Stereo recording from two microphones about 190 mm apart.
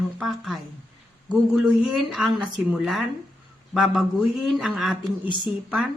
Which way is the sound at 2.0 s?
Centre (ahead or behind).